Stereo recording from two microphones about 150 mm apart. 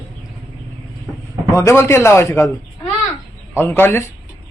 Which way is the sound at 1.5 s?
20° left (ahead or behind).